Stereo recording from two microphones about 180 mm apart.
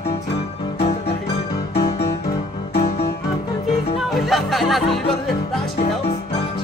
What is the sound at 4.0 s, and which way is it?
Music, centre (ahead or behind).